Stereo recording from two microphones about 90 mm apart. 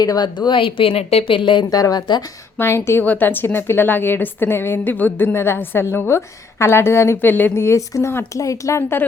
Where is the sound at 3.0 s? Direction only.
20° left (ahead or behind).